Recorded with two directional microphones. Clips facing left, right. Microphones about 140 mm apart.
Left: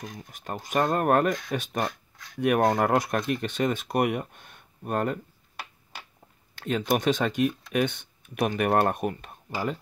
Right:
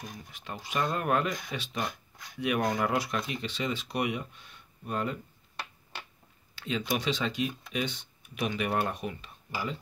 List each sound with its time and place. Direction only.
0.3 s speech: 45° left (ahead or behind)
6.5 s a sound: 50° left (ahead or behind)
6.9 s speech: 50° left (ahead or behind)